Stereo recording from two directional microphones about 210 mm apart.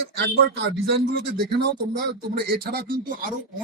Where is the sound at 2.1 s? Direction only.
50° right (ahead or behind).